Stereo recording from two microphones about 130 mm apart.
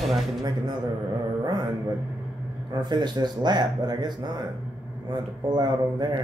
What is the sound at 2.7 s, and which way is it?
Speech, 35° right (ahead or behind).